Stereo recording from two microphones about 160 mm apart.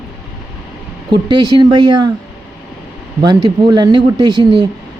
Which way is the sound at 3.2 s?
25° right (ahead or behind).